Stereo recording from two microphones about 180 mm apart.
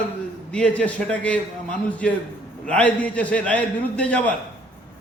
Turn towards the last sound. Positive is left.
turn(degrees=10)  # may be behind; listen again after turning